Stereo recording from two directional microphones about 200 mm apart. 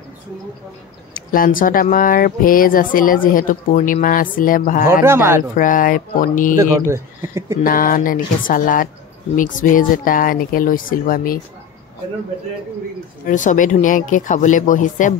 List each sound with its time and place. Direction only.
1.1 s speech: 45° left (ahead or behind)
5.0 s speech: 10° right (ahead or behind)
5.6 s speech: 40° left (ahead or behind)
6.6 s speech: 15° right (ahead or behind)
7.6 s speech: 45° left (ahead or behind)
13.3 s speech: 40° left (ahead or behind)